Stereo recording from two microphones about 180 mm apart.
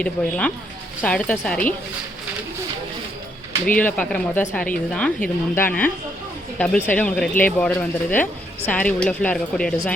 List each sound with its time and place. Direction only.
0.0 s speech: 5° left (ahead or behind)
3.7 s speech: 10° left (ahead or behind)